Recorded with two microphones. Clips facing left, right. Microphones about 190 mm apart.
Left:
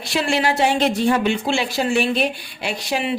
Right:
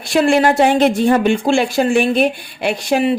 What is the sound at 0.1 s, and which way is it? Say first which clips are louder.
A woman's voice: right 7 dB; 50° right (ahead or behind).